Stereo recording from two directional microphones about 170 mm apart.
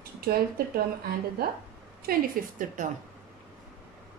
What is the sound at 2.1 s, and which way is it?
Speech, 50° right (ahead or behind).